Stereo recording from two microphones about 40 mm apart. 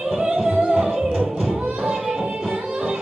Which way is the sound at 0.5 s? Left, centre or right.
Right.